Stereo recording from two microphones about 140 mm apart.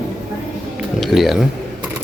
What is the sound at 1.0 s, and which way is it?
Speech, centre (ahead or behind).